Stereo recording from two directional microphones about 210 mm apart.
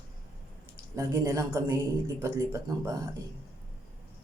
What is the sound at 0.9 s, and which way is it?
Speech, 15° right (ahead or behind).